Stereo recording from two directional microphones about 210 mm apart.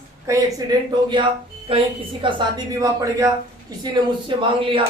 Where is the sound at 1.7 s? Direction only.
25° right (ahead or behind).